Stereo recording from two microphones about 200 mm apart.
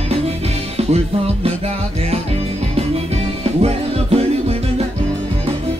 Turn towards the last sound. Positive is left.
turn(degrees=-30)  # may be behind; listen again after turning